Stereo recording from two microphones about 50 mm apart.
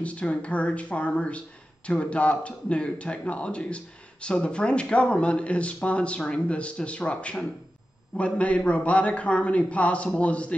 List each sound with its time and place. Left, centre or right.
0.0 s a man's voice: left